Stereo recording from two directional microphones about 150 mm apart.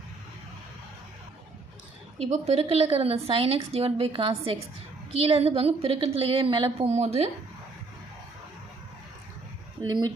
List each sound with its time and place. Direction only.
2.1 s a woman's voice: 45° right (ahead or behind)